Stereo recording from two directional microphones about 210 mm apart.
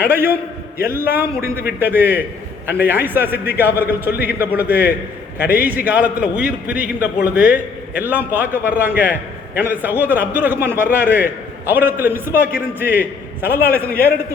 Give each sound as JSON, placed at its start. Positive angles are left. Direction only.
{"t": 0.1, "sound": "a man's voice", "side_deg": -10}
{"t": 5.5, "sound": "a man's voice", "side_deg": -40}
{"t": 5.8, "sound": "a man's voice", "side_deg": -5}
{"t": 13.7, "sound": "a man's voice", "side_deg": 5}